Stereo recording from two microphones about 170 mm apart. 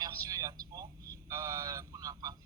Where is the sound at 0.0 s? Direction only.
20° right (ahead or behind).